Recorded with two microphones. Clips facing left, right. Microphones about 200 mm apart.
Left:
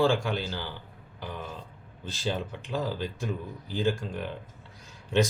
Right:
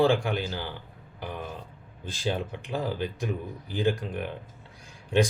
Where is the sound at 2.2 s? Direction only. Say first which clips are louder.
Right 2 dB; 15° right (ahead or behind).